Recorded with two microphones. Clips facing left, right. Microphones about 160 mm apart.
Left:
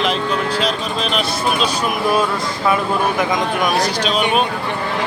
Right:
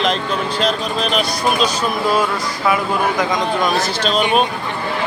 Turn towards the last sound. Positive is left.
turn(degrees=15)  # may be behind; listen again after turning